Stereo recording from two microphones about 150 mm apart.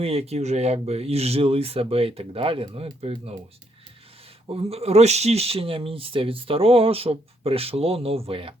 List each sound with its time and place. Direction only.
0.0 s speech: 40° right (ahead or behind)
4.4 s speech: 40° right (ahead or behind)